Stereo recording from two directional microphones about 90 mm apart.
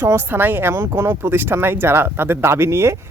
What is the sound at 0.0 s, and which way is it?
Speech, 25° right (ahead or behind).